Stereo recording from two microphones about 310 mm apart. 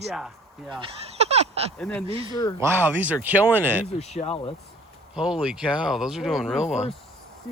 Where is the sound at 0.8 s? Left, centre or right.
Centre.